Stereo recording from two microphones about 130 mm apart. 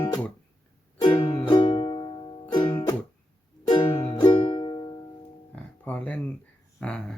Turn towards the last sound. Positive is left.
turn(degrees=10)  # may be behind; listen again after turning